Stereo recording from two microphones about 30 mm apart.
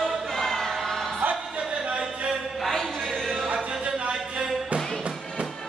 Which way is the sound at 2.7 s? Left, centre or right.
Centre.